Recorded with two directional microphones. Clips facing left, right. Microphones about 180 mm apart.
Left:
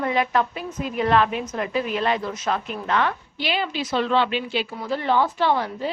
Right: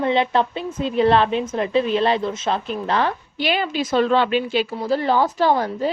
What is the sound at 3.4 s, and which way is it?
A woman's voice, 50° right (ahead or behind).